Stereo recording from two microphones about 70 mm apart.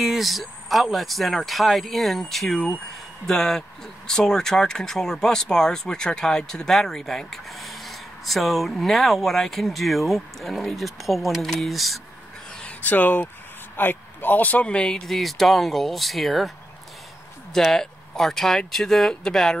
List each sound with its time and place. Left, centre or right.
0.0 s speech: centre
12.6 s speech: left
15.0 s speech: centre